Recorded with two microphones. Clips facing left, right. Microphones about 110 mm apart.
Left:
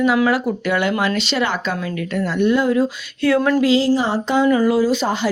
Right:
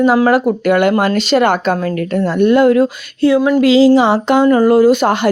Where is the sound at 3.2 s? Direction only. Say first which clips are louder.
Right 5 dB; 30° right (ahead or behind).